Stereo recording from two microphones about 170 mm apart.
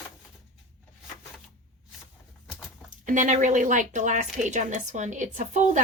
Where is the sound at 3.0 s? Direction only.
50° right (ahead or behind).